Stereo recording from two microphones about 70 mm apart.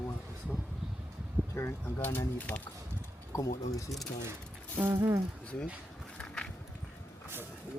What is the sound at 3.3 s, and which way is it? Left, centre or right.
Speech, left.